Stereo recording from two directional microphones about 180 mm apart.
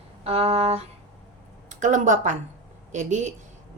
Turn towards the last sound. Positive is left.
turn(degrees=-40)  # may be behind; listen again after turning